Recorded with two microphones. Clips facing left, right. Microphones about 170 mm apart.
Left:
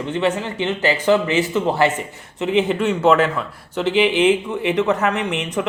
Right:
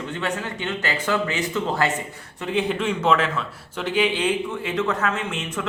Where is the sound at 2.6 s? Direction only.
10° left (ahead or behind).